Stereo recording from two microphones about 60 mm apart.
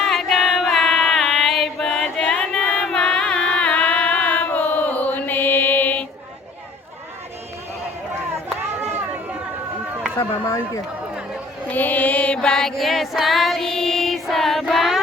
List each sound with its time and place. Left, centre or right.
0.0 s choir: centre
2.2 s a sound: centre
3.5 s chant: left
10.2 s speech: left
11.7 s music: left; by 14.6 s centre
14.7 s a sound: centre